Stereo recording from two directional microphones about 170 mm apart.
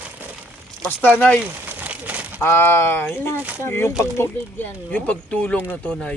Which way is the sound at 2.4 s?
15° left (ahead or behind).